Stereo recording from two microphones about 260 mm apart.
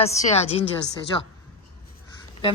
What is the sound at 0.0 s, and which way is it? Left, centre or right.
Speech, left.